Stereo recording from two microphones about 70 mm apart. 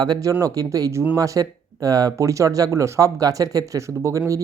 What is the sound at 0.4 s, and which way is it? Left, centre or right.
Speech, right.